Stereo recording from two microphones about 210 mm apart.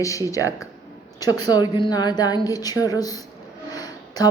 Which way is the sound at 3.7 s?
20° left (ahead or behind).